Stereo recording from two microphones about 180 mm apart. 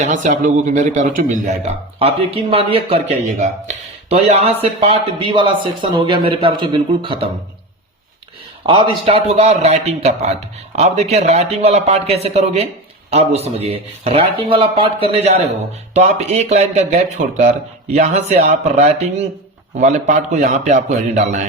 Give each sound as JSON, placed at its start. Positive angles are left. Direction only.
{"t": 0.0, "sound": "a man's voice", "side_deg": -45}
{"t": 8.6, "sound": "a man's voice", "side_deg": -30}